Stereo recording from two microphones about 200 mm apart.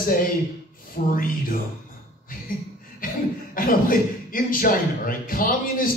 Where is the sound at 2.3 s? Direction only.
45° left (ahead or behind).